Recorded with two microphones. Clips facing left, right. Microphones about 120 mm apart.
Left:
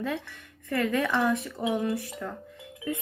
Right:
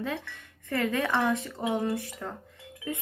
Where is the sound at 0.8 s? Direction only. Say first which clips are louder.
Left 1 dB; 20° right (ahead or behind).